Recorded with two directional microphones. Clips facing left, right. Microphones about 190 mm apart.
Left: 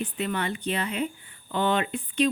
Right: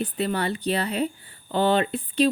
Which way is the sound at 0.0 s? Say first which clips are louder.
Right 3 dB; 35° right (ahead or behind).